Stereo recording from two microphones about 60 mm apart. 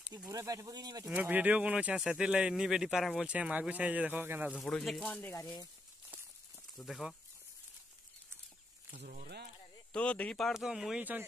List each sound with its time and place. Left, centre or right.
0.3 s speech: right
1.1 s speech: right
2.0 s speech: centre
3.3 s speech: right
4.6 s speech: centre
6.9 s speech: centre
9.9 s speech: centre
10.5 s speech: centre
11.0 s speech: right